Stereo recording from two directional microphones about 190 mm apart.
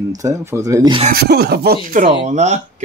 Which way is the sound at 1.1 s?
55° right (ahead or behind).